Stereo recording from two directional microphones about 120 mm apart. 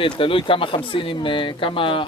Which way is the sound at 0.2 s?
45° left (ahead or behind).